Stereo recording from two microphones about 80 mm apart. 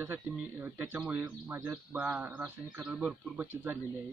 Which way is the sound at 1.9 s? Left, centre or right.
Centre.